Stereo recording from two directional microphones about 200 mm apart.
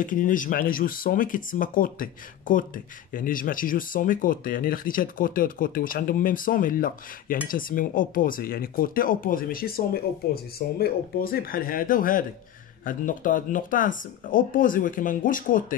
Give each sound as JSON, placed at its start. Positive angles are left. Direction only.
{"t": 0.0, "sound": "speech", "side_deg": 40}